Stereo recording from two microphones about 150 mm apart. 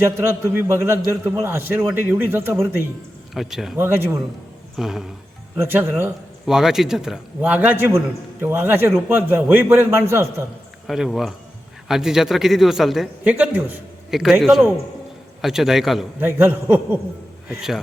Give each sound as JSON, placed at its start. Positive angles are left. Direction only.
{"t": 0.0, "sound": "a man's voice", "side_deg": -15}
{"t": 3.3, "sound": "a man's voice", "side_deg": 0}
{"t": 3.8, "sound": "a man's voice", "side_deg": -15}
{"t": 4.8, "sound": "a man's voice", "side_deg": 0}
{"t": 5.5, "sound": "a man's voice", "side_deg": -15}
{"t": 6.4, "sound": "a man's voice", "side_deg": -5}
{"t": 10.8, "sound": "a man's voice", "side_deg": 0}
{"t": 16.2, "sound": "a man's voice", "side_deg": -15}
{"t": 17.6, "sound": "a man's voice", "side_deg": 0}